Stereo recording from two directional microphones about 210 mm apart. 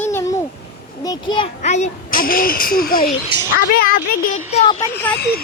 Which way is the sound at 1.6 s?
35° left (ahead or behind).